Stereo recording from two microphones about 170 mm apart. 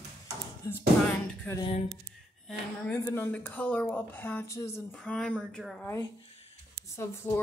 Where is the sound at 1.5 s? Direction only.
10° left (ahead or behind).